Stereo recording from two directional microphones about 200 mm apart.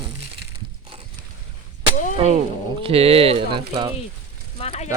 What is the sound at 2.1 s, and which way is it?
Speech, 35° right (ahead or behind).